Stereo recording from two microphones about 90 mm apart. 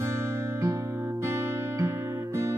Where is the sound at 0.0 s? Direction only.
30° right (ahead or behind).